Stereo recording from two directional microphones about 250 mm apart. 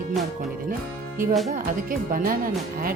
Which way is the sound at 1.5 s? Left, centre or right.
Right.